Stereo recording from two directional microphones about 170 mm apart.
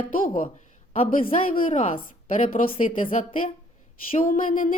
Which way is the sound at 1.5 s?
50° left (ahead or behind).